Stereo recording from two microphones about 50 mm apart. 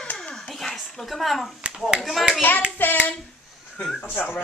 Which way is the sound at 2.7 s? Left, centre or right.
Left.